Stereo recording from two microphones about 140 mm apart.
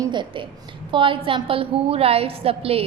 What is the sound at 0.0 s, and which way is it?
A woman's voice, 35° right (ahead or behind).